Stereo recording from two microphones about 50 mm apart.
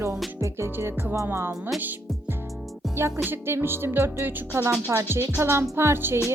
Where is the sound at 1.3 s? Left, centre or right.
Right.